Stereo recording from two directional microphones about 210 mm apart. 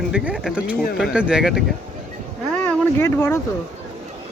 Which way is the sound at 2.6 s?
10° left (ahead or behind).